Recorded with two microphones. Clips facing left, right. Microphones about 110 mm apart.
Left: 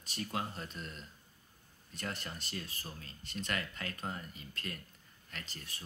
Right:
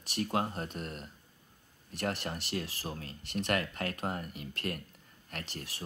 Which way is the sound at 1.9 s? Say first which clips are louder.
Right 7 dB; 70° right (ahead or behind).